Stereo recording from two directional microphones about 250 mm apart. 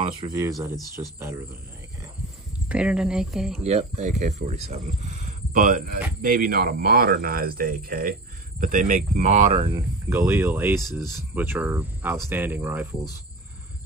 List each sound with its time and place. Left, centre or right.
0.3 s speech: centre
2.7 s speech: centre
3.6 s speech: right; by 13.0 s centre